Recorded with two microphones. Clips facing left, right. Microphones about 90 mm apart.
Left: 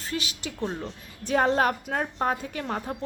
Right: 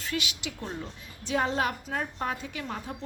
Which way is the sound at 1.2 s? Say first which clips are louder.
Left 5 dB; 45° left (ahead or behind).